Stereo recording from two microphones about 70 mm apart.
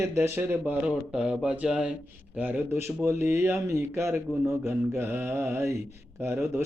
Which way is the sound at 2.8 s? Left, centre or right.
Right.